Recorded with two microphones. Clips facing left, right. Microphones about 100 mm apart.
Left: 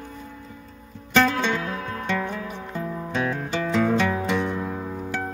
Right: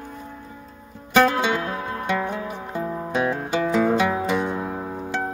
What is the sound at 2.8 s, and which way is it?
Music, 25° right (ahead or behind).